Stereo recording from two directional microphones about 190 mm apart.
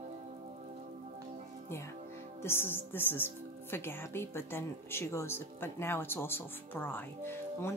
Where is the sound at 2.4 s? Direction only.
10° left (ahead or behind).